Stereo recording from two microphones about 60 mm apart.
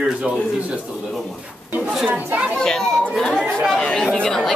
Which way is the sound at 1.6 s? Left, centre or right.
Right.